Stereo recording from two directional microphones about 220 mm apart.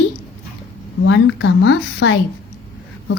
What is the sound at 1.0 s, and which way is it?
Speech, 60° left (ahead or behind).